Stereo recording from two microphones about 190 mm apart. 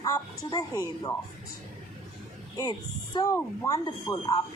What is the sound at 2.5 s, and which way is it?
Speech, 20° left (ahead or behind).